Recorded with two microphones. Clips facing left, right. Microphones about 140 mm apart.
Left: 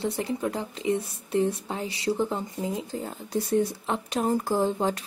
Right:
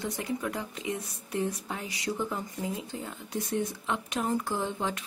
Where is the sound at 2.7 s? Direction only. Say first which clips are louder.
Left 5 dB; 40° left (ahead or behind).